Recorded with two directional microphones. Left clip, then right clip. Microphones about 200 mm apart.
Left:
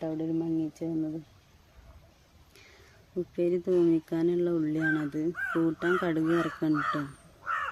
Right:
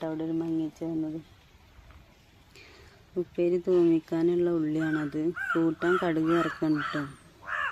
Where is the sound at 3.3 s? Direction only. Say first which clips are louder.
Right 2 dB; 5° left (ahead or behind).